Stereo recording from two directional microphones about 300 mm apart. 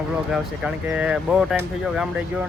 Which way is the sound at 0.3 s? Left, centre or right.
Centre.